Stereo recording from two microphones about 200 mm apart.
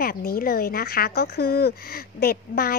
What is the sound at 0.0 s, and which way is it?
A woman's voice, 50° left (ahead or behind).